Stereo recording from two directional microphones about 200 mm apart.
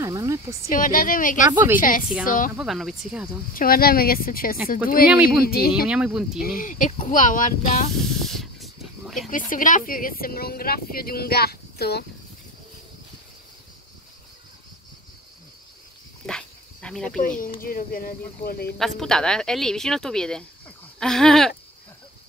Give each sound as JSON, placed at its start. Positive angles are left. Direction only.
{"t": 0.0, "sound": "speech", "side_deg": -15}
{"t": 0.7, "sound": "speech", "side_deg": 45}
{"t": 1.5, "sound": "speech", "side_deg": -10}
{"t": 1.8, "sound": "speech", "side_deg": 45}
{"t": 2.5, "sound": "speech", "side_deg": 0}
{"t": 3.5, "sound": "speech", "side_deg": 45}
{"t": 5.1, "sound": "speech", "side_deg": -5}
{"t": 6.4, "sound": "speech", "side_deg": 45}
{"t": 8.0, "sound": "snake", "side_deg": 0}
{"t": 9.3, "sound": "speech", "side_deg": 40}
{"t": 16.3, "sound": "dog", "side_deg": 5}
{"t": 17.4, "sound": "speech", "side_deg": 45}
{"t": 18.8, "sound": "speech", "side_deg": 0}